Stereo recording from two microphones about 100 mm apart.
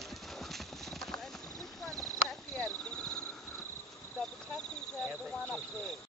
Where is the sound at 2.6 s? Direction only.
10° left (ahead or behind).